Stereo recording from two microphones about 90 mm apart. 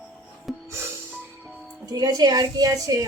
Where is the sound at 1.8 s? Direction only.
50° right (ahead or behind).